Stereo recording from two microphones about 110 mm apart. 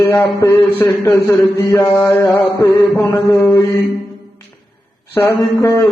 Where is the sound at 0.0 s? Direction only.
25° left (ahead or behind).